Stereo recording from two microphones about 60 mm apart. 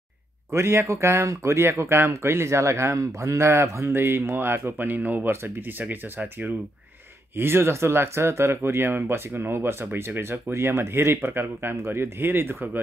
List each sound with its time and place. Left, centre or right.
0.5 s speech: right
4.8 s speech: right
5.3 s speech: right
5.9 s speech: right
7.3 s speech: right